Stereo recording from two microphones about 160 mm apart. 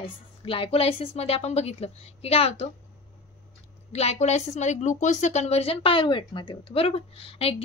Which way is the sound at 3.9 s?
40° left (ahead or behind).